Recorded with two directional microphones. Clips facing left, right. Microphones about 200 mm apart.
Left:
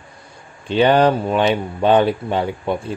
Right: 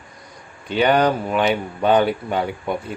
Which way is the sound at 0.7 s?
25° left (ahead or behind).